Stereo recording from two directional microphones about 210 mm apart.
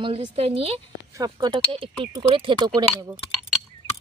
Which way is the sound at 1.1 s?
20° right (ahead or behind).